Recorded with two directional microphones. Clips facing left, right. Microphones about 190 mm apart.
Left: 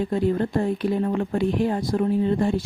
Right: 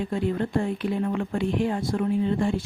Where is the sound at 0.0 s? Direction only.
40° left (ahead or behind).